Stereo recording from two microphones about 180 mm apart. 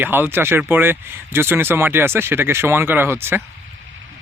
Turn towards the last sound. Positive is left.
turn(degrees=-10)  # may be behind; listen again after turning